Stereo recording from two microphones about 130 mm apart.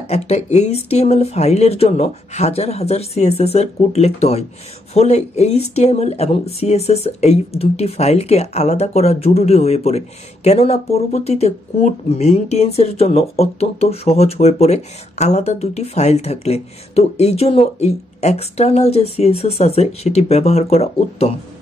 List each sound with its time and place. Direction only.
0.1 s speech: 55° left (ahead or behind)